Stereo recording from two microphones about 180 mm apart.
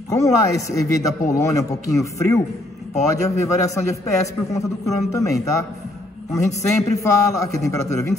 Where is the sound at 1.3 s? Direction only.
15° left (ahead or behind).